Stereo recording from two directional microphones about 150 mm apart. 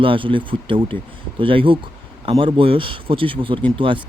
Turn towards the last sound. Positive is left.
turn(degrees=-35)  # may be behind; listen again after turning